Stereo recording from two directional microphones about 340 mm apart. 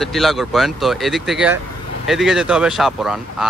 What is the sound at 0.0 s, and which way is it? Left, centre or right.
Speech, centre.